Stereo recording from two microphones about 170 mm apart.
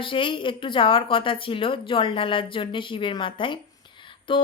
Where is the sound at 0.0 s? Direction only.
30° left (ahead or behind).